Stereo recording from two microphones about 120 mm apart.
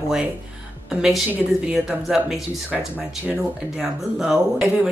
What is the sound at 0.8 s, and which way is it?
A woman's voice, 5° right (ahead or behind).